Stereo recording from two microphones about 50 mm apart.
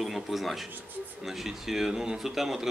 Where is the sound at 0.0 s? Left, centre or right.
Centre.